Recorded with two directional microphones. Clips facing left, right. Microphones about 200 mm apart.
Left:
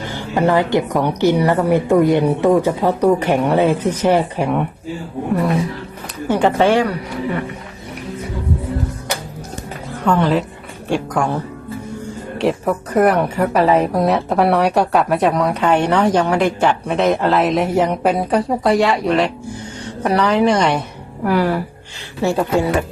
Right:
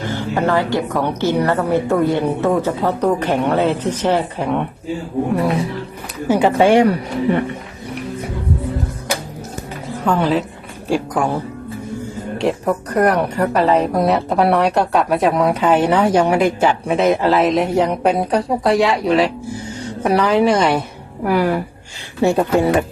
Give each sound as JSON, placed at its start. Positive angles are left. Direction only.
{"t": 0.1, "sound": "a woman's voice", "side_deg": 15}
{"t": 6.2, "sound": "a woman's voice", "side_deg": -5}
{"t": 10.0, "sound": "a woman's voice", "side_deg": 0}
{"t": 12.4, "sound": "a woman's voice", "side_deg": 0}